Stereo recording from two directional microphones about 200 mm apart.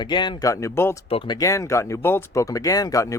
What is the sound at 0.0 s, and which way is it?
Speech, 20° left (ahead or behind).